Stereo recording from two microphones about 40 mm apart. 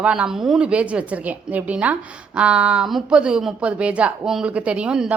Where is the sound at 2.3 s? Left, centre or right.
Right.